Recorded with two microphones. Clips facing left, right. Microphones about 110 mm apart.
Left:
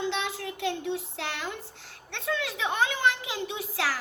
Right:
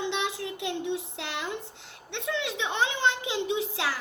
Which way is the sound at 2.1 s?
20° right (ahead or behind).